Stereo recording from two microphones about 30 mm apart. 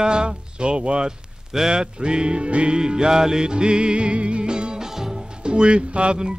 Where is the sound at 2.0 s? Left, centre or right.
Right.